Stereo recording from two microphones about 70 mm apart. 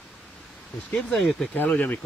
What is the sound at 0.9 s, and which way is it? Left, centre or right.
Speech, centre.